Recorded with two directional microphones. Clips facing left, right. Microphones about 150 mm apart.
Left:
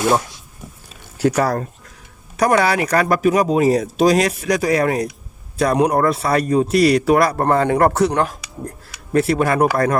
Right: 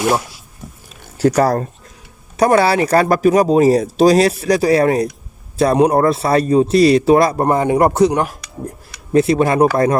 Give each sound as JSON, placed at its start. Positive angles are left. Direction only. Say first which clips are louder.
{"t": 1.2, "sound": "a man's voice", "louder": "right 4 dB", "side_deg": -35}